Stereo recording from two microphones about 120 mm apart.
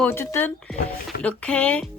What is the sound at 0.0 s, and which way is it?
Speech, 20° left (ahead or behind).